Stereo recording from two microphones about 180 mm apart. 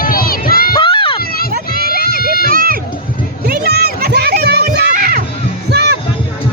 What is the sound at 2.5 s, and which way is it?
Music, 55° right (ahead or behind).